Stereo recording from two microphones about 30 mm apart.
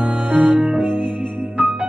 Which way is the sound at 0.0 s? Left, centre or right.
Right.